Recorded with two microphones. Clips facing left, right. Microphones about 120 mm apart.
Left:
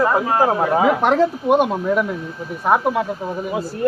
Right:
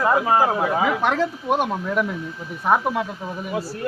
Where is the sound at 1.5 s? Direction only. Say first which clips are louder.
Left 4 dB; 5° left (ahead or behind).